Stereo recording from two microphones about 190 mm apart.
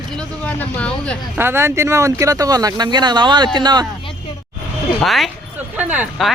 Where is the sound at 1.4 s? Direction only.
10° right (ahead or behind).